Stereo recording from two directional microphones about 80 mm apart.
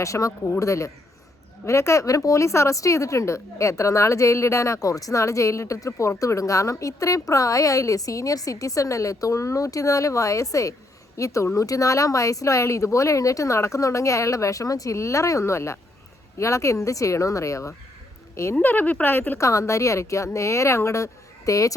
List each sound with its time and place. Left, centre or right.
0.0 s speech: left
18.5 s speech: left
19.4 s speech: left